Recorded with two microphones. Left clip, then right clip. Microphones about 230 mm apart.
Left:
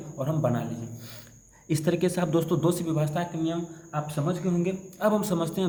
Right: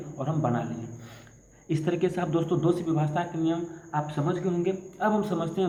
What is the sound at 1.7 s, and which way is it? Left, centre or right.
A man's voice, left.